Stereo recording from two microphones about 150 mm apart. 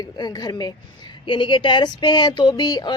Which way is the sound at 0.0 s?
25° left (ahead or behind).